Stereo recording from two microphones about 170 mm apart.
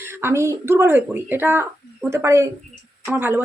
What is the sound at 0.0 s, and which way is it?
Speech, 15° right (ahead or behind).